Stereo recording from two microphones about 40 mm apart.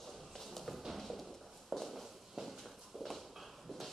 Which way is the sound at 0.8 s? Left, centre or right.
Centre.